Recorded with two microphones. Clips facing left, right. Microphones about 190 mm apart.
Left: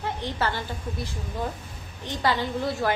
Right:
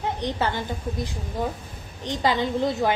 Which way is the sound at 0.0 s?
15° right (ahead or behind).